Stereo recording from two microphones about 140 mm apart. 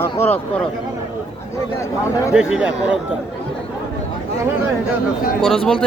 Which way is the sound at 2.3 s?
5° right (ahead or behind).